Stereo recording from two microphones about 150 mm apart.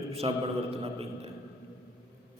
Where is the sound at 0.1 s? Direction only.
40° right (ahead or behind).